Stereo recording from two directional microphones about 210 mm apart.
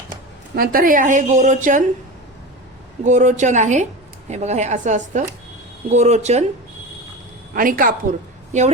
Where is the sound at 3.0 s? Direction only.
35° right (ahead or behind).